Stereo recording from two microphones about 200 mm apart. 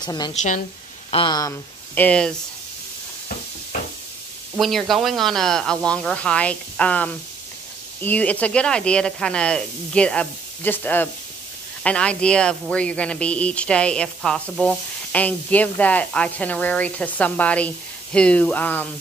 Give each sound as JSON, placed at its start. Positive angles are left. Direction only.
{"t": 0.0, "sound": "a woman's voice", "side_deg": 20}
{"t": 0.3, "sound": "a woman's voice", "side_deg": 35}
{"t": 1.1, "sound": "speech", "side_deg": 20}
{"t": 4.6, "sound": "speech", "side_deg": 0}